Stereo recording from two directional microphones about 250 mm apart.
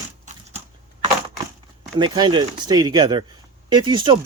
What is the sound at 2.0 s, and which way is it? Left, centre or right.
Speech, centre.